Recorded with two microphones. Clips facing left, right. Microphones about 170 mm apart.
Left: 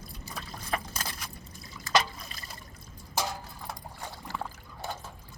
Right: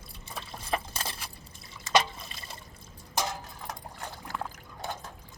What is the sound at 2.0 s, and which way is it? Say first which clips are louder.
Trickle: right 1 dB; 25° right (ahead or behind).